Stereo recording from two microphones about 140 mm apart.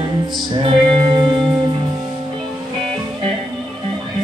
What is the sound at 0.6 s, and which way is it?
Music, 35° right (ahead or behind).